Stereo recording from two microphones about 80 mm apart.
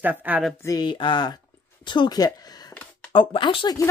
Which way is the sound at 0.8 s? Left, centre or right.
Left.